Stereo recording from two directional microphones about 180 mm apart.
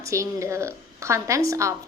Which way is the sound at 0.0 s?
15° right (ahead or behind).